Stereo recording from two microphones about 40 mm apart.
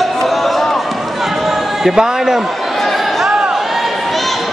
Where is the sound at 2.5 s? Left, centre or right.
Centre.